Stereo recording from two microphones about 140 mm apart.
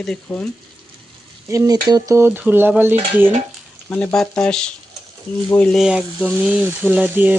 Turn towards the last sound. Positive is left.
turn(degrees=-10)  # may be behind; listen again after turning